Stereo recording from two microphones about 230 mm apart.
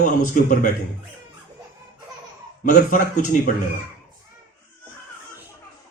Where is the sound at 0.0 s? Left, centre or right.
Left.